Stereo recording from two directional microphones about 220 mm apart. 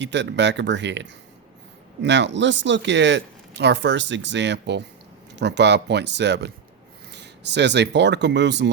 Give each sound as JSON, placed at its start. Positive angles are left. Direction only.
{"t": 0.0, "sound": "speech", "side_deg": -55}